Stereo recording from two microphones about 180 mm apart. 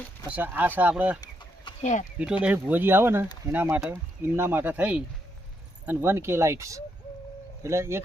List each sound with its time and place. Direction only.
0.3 s speech: 10° right (ahead or behind)
1.8 s speech: 45° left (ahead or behind)
2.4 s speech: 10° right (ahead or behind)